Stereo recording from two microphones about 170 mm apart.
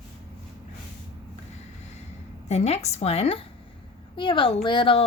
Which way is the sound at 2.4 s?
40° left (ahead or behind).